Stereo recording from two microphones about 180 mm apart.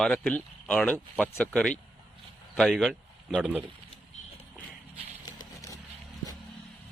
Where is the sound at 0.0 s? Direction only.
5° left (ahead or behind).